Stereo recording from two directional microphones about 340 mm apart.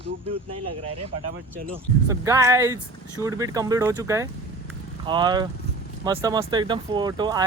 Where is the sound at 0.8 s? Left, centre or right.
Centre.